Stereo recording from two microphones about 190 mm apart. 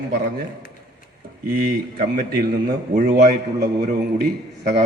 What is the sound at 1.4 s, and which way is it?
A man's voice, 50° right (ahead or behind).